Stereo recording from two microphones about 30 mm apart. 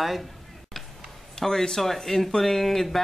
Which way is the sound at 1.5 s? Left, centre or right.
Centre.